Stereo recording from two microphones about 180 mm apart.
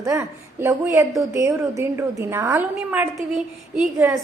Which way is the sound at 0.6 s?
15° right (ahead or behind).